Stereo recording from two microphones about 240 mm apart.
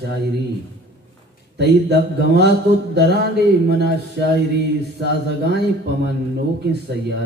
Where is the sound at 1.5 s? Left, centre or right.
Right.